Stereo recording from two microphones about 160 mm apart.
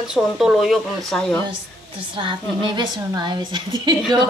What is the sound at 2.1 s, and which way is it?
A woman's voice, 30° right (ahead or behind).